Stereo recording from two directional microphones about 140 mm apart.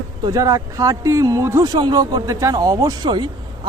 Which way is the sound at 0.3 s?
25° right (ahead or behind).